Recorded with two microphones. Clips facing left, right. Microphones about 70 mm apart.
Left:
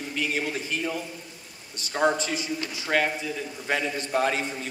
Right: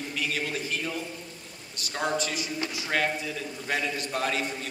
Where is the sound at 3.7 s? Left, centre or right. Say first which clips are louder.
Left 3 dB; left.